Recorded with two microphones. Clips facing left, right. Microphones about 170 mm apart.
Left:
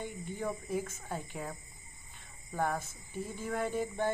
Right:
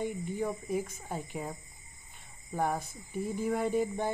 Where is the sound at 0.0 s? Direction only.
15° right (ahead or behind).